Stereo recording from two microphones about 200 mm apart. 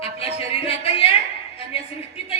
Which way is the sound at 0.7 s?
30° left (ahead or behind).